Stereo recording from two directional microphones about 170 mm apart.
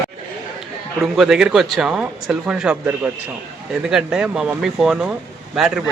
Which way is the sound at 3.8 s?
5° right (ahead or behind).